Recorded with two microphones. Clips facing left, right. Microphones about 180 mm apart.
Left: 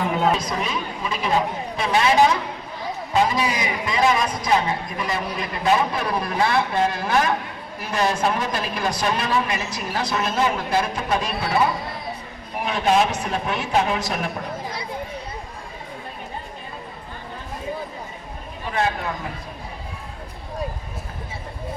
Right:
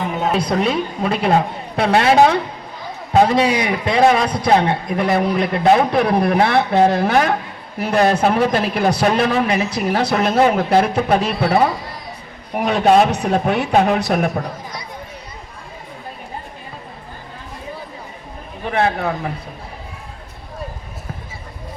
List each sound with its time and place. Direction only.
0.3 s a man's voice: 70° right (ahead or behind)
18.6 s a man's voice: 60° right (ahead or behind)